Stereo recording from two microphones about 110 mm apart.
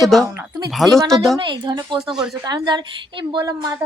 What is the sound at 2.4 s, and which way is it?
A woman's voice, 40° right (ahead or behind).